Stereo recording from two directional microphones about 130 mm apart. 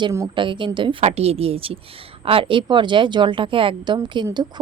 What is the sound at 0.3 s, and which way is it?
A woman's voice, 40° right (ahead or behind).